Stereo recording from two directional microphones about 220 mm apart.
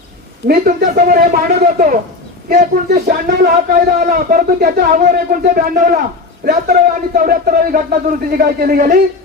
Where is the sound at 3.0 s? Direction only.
45° right (ahead or behind).